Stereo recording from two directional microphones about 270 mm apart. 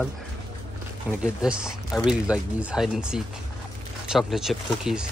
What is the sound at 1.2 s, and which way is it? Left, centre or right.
Speech, centre.